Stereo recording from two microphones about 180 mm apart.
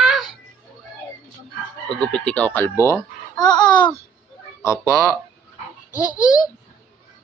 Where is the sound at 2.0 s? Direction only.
5° left (ahead or behind); by 3.9 s 25° left (ahead or behind).